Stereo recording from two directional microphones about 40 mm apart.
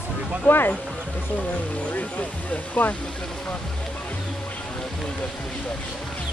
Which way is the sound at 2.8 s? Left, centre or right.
Left.